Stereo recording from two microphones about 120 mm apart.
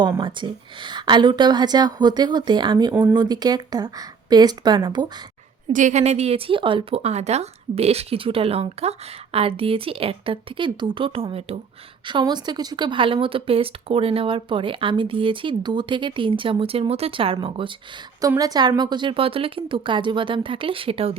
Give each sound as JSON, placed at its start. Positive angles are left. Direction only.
{"t": 0.2, "sound": "a woman's voice", "side_deg": -40}
{"t": 2.9, "sound": "speech", "side_deg": -15}
{"t": 3.2, "sound": "a woman's voice", "side_deg": -35}
{"t": 5.7, "sound": "a woman's voice", "side_deg": -85}
{"t": 7.0, "sound": "speech", "side_deg": -65}
{"t": 12.0, "sound": "speech", "side_deg": -40}
{"t": 18.3, "sound": "a woman's voice", "side_deg": -35}